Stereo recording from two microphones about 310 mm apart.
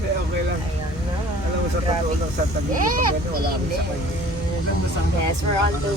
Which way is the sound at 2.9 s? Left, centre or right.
Right.